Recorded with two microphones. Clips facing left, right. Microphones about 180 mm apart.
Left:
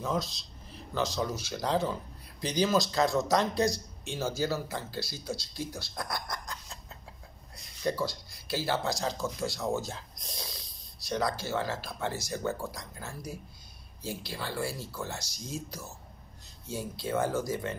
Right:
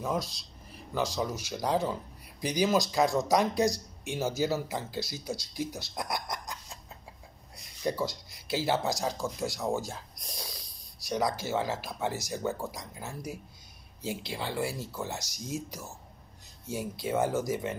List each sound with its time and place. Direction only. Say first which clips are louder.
0.0 s speech: even; 10° right (ahead or behind)
10.3 s snort: even; centre (ahead or behind)
11.1 s speech: right 1 dB; 15° right (ahead or behind)